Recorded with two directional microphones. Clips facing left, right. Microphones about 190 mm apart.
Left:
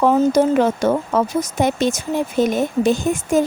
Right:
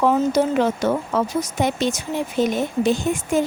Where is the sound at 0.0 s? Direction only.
45° left (ahead or behind).